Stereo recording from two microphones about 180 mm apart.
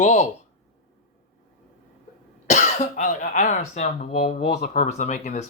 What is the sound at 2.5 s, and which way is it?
Speech, 45° left (ahead or behind).